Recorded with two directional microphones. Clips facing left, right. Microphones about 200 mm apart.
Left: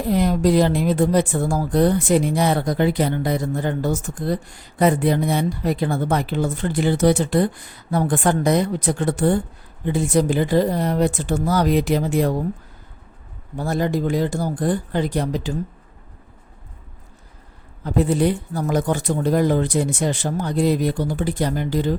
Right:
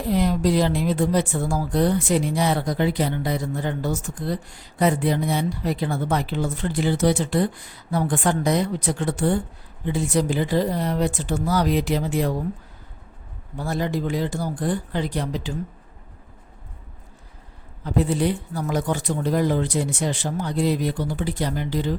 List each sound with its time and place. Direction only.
0.1 s a woman's voice: 50° left (ahead or behind)
13.6 s a woman's voice: 45° left (ahead or behind)
17.8 s a woman's voice: 45° left (ahead or behind)